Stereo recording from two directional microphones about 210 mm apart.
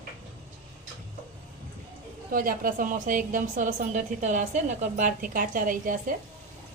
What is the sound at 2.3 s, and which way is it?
A woman's voice, 40° right (ahead or behind).